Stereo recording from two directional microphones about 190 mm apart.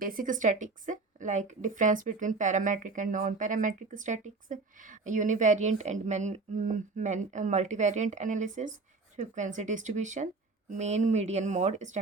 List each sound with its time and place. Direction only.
0.0 s a woman's voice: 50° right (ahead or behind)